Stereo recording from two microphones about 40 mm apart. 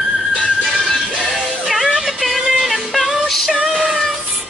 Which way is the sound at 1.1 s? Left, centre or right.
Centre.